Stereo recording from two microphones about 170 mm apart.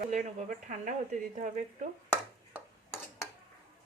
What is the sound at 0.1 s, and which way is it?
Speech, 45° right (ahead or behind).